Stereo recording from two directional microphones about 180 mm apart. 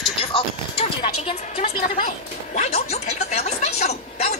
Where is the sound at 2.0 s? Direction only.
40° left (ahead or behind).